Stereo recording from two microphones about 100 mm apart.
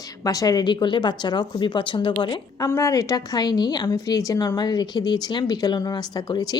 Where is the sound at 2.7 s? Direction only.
35° left (ahead or behind).